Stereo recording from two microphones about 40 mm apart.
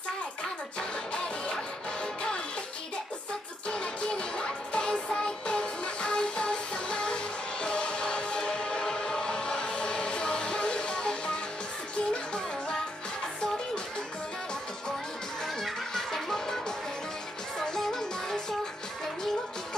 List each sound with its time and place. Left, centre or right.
0.7 s music: left
3.6 s music: left
8.4 s choir: left
12.1 s music: left
15.9 s music: centre